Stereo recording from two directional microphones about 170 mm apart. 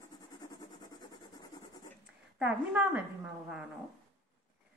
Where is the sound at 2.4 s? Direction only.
10° right (ahead or behind).